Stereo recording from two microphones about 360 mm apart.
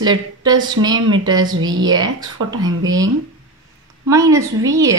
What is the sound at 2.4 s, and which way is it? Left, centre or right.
Speech, right.